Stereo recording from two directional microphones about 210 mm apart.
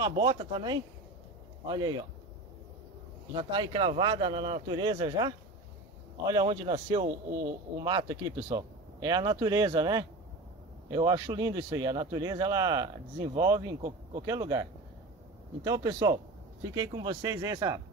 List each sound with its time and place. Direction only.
0.2 s speech: 25° right (ahead or behind)
3.3 s speech: 20° right (ahead or behind)